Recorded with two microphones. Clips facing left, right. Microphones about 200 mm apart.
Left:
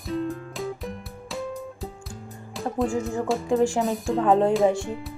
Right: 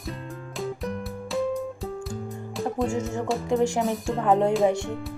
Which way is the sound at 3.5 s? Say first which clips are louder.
Left 1 dB; 20° right (ahead or behind).